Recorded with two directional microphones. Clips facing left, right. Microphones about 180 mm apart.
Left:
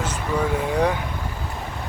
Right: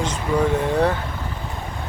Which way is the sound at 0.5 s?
10° left (ahead or behind).